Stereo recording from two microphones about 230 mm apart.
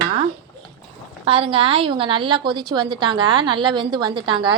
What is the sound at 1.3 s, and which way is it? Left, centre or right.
A woman's voice, right.